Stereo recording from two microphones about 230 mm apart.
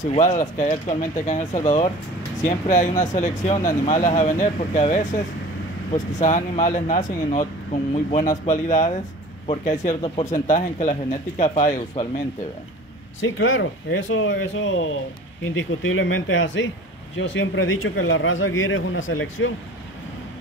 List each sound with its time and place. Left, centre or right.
0.0 s speech: left
6.1 s speech: left
13.4 s a man's voice: left